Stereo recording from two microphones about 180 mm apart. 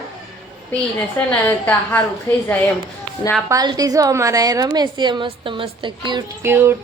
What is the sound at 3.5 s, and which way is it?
A woman's voice, 20° right (ahead or behind).